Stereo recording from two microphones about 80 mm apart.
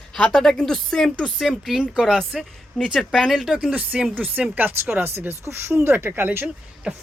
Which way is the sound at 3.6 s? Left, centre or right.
Centre.